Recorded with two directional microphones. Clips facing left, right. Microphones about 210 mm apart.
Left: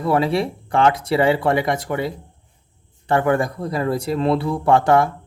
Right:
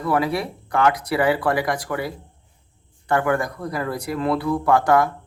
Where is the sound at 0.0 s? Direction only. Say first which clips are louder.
Left 3 dB; 25° left (ahead or behind).